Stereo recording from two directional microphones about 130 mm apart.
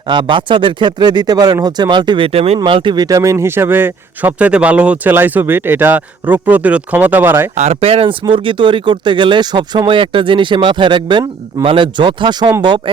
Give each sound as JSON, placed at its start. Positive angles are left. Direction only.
{"t": 0.1, "sound": "speech", "side_deg": -35}
{"t": 7.5, "sound": "speech", "side_deg": -55}